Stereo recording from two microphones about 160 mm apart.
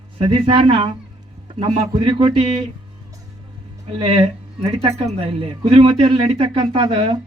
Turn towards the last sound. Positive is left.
turn(degrees=-30)  # may be behind; listen again after turning